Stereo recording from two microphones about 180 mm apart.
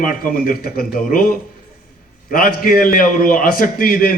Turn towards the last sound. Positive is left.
turn(degrees=50)  # may be behind; listen again after turning